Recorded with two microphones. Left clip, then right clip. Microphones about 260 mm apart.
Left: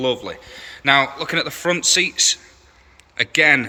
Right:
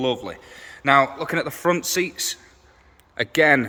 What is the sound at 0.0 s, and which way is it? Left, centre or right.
A man's voice, centre.